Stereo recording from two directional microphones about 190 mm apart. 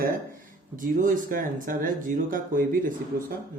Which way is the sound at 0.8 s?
45° right (ahead or behind).